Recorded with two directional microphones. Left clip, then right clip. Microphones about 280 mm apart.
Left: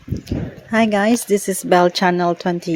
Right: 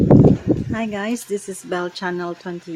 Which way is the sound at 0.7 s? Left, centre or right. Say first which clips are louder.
Left 9 dB; left.